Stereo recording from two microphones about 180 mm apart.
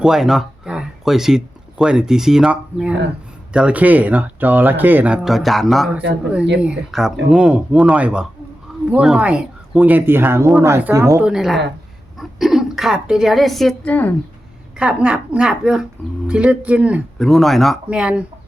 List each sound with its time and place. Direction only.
0.0 s speech: centre (ahead or behind)
11.3 s speech: centre (ahead or behind)
14.8 s speech: 5° right (ahead or behind)